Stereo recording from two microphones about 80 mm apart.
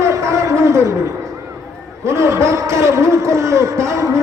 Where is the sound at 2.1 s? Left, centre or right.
Right.